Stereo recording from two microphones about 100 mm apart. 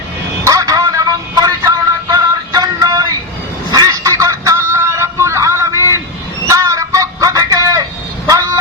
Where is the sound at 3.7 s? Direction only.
40° right (ahead or behind).